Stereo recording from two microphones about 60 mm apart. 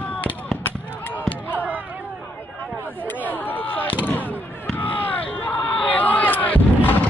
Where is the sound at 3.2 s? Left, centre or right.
Left.